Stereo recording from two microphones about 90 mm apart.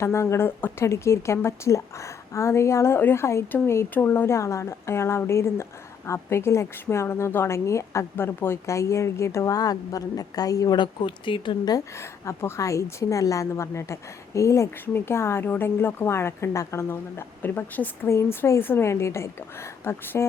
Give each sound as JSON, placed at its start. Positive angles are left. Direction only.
{"t": 0.0, "sound": "a woman's voice", "side_deg": 30}
{"t": 10.8, "sound": "speech", "side_deg": 65}
{"t": 11.9, "sound": "a woman's voice", "side_deg": 30}